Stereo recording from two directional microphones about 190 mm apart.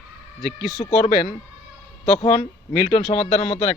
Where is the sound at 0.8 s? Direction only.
30° left (ahead or behind).